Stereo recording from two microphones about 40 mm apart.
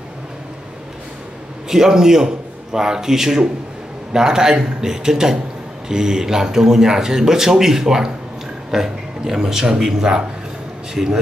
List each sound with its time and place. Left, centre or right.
1.7 s speech: centre